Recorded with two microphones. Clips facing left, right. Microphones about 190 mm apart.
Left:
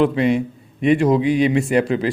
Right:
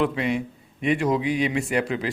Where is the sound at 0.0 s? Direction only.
30° left (ahead or behind).